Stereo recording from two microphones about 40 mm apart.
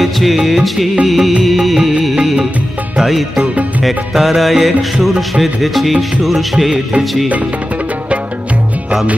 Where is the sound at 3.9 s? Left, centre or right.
Centre.